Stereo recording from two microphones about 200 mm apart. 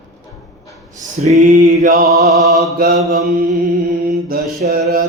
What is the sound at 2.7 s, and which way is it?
Mantra, 45° right (ahead or behind).